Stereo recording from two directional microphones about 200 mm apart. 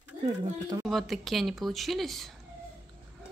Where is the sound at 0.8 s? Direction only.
Centre (ahead or behind).